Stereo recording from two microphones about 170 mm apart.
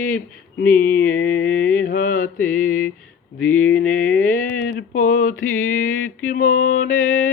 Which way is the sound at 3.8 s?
55° left (ahead or behind).